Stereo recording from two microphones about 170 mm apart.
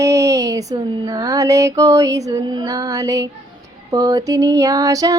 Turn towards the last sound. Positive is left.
turn(degrees=-20)  # may be behind; listen again after turning